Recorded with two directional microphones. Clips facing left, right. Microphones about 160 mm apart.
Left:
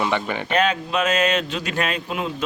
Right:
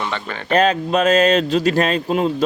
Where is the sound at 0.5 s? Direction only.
35° right (ahead or behind).